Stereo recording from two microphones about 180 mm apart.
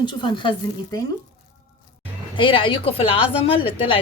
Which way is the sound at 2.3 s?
30° left (ahead or behind).